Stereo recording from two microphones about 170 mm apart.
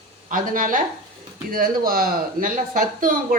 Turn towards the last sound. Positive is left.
turn(degrees=-55)  # may be behind; listen again after turning